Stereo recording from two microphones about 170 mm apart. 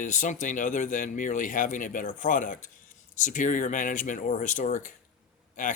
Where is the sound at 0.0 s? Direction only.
45° left (ahead or behind).